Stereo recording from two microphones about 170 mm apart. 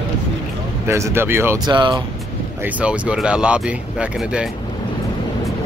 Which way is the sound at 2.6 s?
10° right (ahead or behind).